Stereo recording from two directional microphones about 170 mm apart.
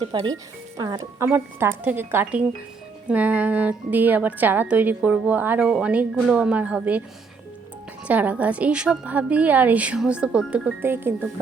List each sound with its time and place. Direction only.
0.1 s a woman's voice: 25° right (ahead or behind); by 7.0 s 10° right (ahead or behind)
8.0 s a woman's voice: 10° right (ahead or behind)